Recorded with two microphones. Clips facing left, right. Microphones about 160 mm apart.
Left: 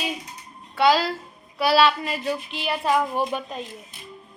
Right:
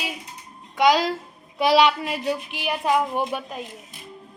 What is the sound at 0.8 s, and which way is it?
Speech, 15° right (ahead or behind).